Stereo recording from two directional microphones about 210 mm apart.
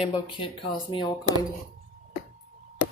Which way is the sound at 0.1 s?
25° left (ahead or behind).